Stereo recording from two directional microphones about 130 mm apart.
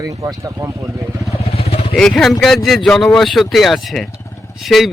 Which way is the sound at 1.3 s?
50° left (ahead or behind).